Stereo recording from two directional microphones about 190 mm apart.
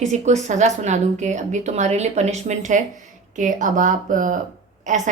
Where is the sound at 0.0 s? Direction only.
40° right (ahead or behind).